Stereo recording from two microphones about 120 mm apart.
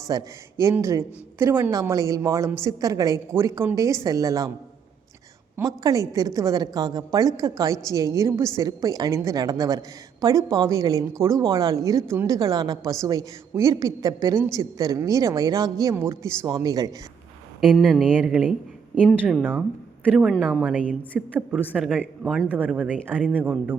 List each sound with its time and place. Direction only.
0.1 s a woman's voice: 30° right (ahead or behind)
5.5 s a woman's voice: 25° right (ahead or behind)
17.6 s speech: 5° left (ahead or behind)
18.3 s a woman's voice: 10° right (ahead or behind)